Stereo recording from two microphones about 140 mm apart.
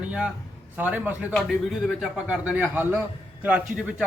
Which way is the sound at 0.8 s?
10° right (ahead or behind).